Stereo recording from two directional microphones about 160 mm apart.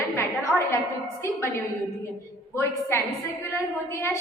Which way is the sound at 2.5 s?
15° left (ahead or behind).